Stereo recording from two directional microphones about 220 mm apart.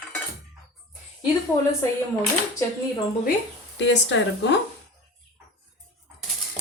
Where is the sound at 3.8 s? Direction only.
55° left (ahead or behind).